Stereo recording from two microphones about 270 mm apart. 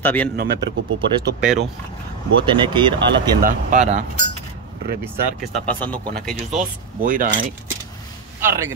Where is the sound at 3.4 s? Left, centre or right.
Right.